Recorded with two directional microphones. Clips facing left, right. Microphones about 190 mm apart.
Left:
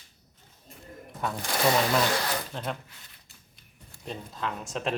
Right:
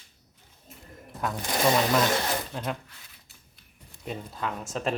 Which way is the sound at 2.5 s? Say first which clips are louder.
Right 1 dB; centre (ahead or behind).